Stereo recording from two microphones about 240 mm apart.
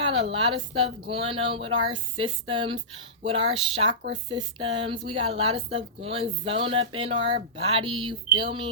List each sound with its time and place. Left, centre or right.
0.0 s a woman's voice: right